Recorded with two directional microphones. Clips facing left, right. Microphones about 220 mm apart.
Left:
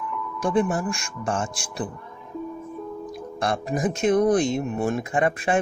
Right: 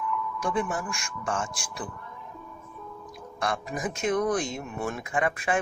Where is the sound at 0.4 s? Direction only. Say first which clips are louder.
Left 8 dB; 30° left (ahead or behind).